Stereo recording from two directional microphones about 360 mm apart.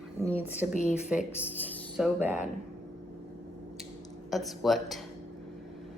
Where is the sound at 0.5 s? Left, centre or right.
Centre.